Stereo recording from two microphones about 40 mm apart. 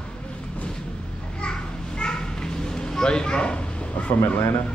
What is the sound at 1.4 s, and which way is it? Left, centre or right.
Children playing, left.